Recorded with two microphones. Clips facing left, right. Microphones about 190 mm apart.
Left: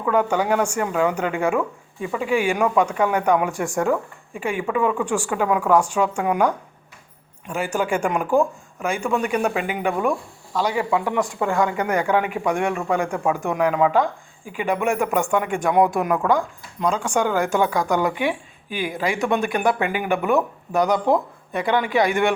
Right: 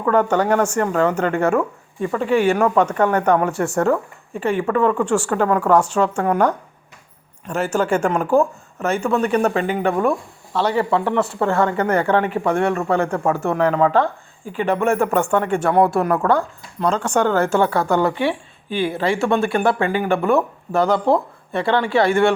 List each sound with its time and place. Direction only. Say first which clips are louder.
0.0 s speech: right 3 dB; 10° left (ahead or behind)